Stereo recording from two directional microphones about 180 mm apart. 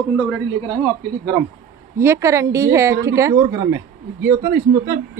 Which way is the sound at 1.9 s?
15° right (ahead or behind).